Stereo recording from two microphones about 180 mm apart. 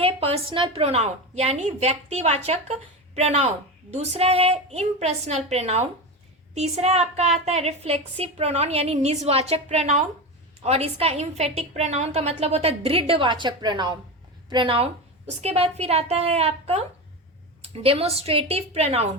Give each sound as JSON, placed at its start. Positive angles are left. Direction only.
{"t": 0.0, "sound": "a woman's voice", "side_deg": -30}